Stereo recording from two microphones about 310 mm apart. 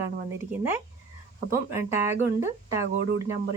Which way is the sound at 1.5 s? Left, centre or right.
Centre.